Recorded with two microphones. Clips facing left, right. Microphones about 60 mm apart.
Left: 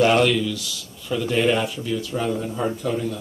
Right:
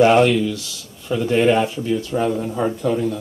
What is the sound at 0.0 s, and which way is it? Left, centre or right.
Speech, right.